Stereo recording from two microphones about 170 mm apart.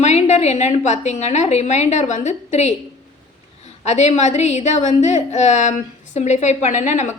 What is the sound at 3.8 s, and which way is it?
A woman's voice, 40° left (ahead or behind).